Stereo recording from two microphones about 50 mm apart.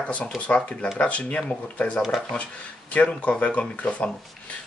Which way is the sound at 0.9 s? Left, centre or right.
Left.